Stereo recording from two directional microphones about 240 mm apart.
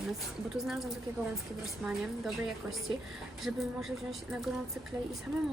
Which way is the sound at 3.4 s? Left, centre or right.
Centre.